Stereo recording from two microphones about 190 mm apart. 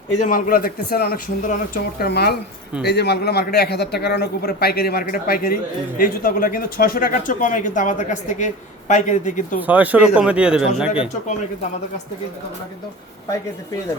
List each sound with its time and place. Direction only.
0.2 s a man's voice: 45° left (ahead or behind)
9.6 s speech: 10° right (ahead or behind)